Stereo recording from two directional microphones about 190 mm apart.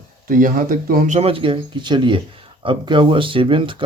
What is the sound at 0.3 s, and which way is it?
Speech, 45° right (ahead or behind).